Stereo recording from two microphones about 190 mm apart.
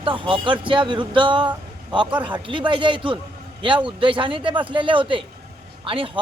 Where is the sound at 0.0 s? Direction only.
25° right (ahead or behind).